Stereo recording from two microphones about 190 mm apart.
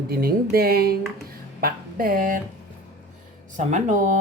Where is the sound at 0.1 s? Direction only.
55° right (ahead or behind).